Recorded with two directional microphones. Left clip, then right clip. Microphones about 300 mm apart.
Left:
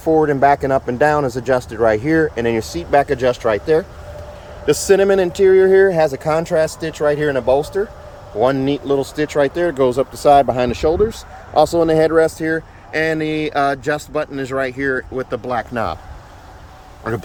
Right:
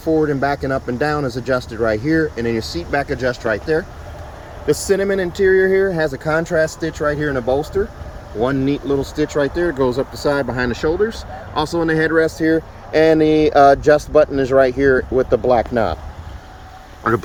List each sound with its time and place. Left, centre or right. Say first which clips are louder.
0.0 s speech: left 4 dB; centre
6.4 s speech: left 1 dB; centre
7.0 s speech: left 4 dB; centre
12.9 s speech: right 6 dB; centre
15.7 s speech: right 3 dB; left
17.0 s speech: right 6 dB; centre